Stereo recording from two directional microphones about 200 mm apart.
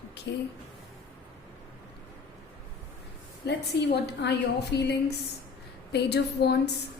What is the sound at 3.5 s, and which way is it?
A woman's voice, 55° left (ahead or behind).